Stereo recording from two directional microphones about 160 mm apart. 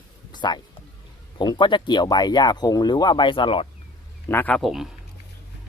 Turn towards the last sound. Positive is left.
turn(degrees=0)  # may be behind; listen again after turning